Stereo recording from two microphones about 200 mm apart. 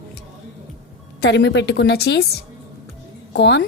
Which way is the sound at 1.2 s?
60° left (ahead or behind).